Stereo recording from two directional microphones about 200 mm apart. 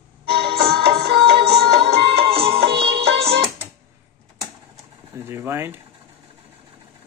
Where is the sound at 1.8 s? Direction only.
30° right (ahead or behind).